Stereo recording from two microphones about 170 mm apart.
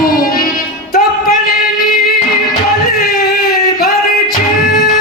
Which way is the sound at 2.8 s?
60° left (ahead or behind).